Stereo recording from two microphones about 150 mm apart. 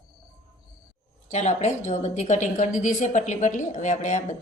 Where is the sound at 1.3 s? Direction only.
50° left (ahead or behind).